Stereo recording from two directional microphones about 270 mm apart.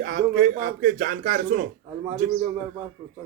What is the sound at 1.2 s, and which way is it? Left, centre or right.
Speech, right.